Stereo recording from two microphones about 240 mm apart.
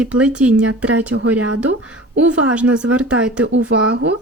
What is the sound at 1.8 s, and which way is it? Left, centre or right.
Speech, centre.